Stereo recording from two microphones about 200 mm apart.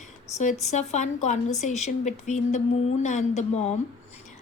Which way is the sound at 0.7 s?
35° left (ahead or behind).